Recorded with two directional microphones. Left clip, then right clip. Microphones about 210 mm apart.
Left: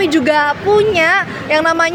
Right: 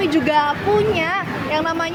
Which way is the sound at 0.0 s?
50° left (ahead or behind).